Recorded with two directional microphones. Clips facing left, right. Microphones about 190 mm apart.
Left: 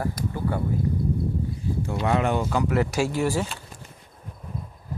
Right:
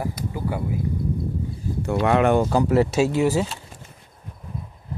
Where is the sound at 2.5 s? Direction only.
30° right (ahead or behind).